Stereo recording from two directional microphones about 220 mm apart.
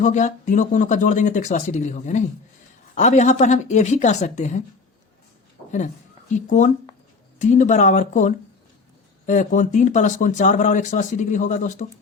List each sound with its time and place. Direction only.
0.0 s speech: 35° left (ahead or behind)
6.3 s speech: 35° left (ahead or behind)